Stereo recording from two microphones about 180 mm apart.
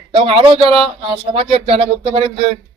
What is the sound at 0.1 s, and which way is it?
A man's voice, 30° right (ahead or behind).